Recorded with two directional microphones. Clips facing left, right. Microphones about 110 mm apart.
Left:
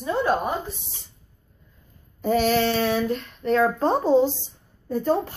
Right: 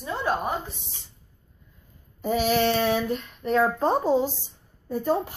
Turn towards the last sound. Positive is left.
turn(degrees=-10)  # may be behind; listen again after turning